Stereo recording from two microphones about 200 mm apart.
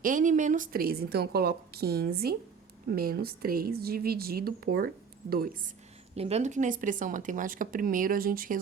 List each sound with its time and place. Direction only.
0.0 s a woman's voice: 40° right (ahead or behind)
6.1 s speech: 30° right (ahead or behind)